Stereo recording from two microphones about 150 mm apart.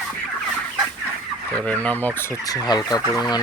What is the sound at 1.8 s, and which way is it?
Speech, 10° left (ahead or behind).